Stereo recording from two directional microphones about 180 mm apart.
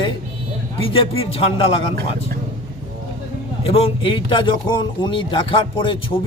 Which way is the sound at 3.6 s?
30° left (ahead or behind).